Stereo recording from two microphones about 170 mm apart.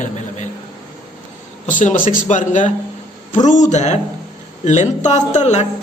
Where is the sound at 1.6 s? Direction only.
45° left (ahead or behind).